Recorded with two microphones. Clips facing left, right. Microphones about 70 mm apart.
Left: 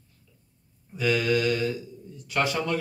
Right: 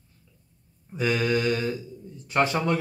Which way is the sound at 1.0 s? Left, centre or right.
Right.